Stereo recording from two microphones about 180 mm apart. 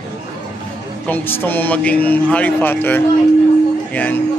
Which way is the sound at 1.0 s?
10° left (ahead or behind).